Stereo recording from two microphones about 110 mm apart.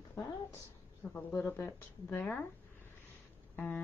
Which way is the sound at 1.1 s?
20° left (ahead or behind).